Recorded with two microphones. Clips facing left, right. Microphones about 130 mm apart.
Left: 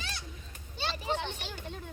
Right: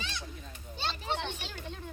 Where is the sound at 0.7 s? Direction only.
5° left (ahead or behind).